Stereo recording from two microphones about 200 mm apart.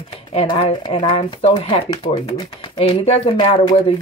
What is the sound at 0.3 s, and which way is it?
Speech, 25° left (ahead or behind).